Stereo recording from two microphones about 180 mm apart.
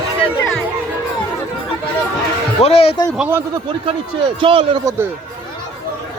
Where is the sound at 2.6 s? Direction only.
35° left (ahead or behind).